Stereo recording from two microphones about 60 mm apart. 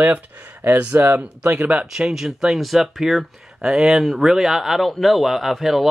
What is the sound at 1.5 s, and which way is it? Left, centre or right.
Speech, right.